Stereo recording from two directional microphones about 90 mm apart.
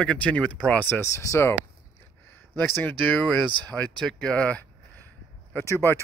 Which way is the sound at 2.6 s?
20° left (ahead or behind).